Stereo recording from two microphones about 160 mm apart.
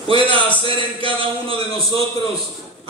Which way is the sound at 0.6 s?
35° right (ahead or behind).